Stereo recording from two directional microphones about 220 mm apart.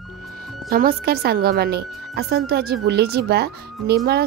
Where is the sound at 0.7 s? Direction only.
45° right (ahead or behind).